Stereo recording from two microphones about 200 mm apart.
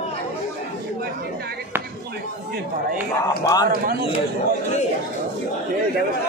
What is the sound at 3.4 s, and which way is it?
Speech, 15° left (ahead or behind).